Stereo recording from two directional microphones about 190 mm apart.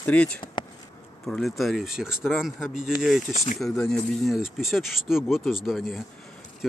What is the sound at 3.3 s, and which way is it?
Speech, 35° left (ahead or behind).